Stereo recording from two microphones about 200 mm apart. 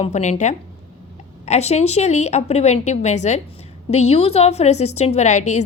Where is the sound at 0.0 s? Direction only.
35° left (ahead or behind).